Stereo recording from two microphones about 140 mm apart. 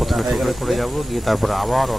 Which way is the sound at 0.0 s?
Centre (ahead or behind).